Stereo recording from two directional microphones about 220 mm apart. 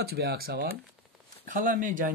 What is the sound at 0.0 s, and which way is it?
Speech, 45° right (ahead or behind).